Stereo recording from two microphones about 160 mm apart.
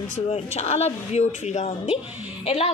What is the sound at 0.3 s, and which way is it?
A woman's voice, 40° left (ahead or behind).